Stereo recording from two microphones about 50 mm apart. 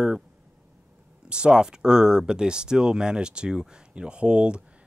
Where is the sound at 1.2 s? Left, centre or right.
Centre.